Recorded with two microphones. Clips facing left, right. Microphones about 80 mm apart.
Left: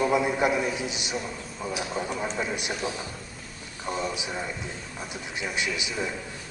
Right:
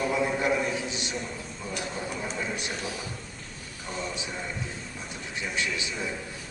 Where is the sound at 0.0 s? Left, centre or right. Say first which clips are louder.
Left 3 dB; centre.